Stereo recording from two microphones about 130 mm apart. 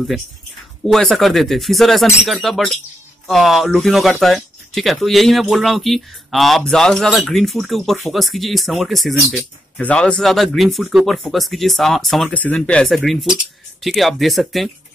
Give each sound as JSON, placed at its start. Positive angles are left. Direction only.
{"t": 0.8, "sound": "speech", "side_deg": 0}
{"t": 12.3, "sound": "speech", "side_deg": 10}